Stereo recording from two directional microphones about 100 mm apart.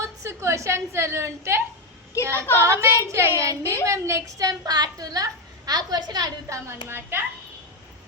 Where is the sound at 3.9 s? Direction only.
30° right (ahead or behind).